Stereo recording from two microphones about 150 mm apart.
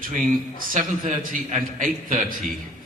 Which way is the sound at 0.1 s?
60° right (ahead or behind).